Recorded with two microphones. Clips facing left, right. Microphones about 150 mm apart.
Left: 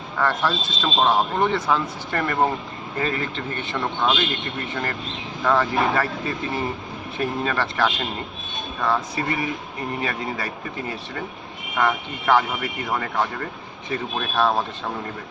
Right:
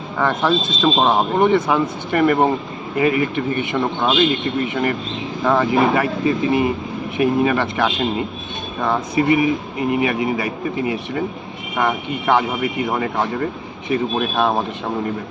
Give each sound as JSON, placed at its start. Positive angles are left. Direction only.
{"t": 0.2, "sound": "speech", "side_deg": -15}